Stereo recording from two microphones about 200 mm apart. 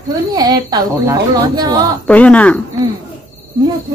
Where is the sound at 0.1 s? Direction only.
20° right (ahead or behind).